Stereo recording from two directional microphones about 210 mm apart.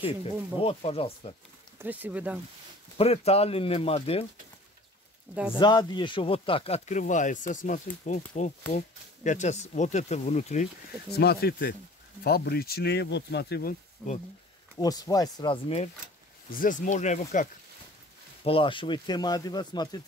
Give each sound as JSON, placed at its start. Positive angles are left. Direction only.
{"t": 0.0, "sound": "speech", "side_deg": 25}
{"t": 1.8, "sound": "speech", "side_deg": -10}
{"t": 3.0, "sound": "speech", "side_deg": 30}
{"t": 5.6, "sound": "speech", "side_deg": 20}
{"t": 11.1, "sound": "speech", "side_deg": 50}
{"t": 14.8, "sound": "speech", "side_deg": 20}
{"t": 16.4, "sound": "speech", "side_deg": 40}
{"t": 18.4, "sound": "speech", "side_deg": 25}